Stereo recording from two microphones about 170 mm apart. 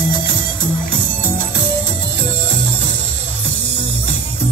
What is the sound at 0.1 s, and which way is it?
Music, 25° left (ahead or behind).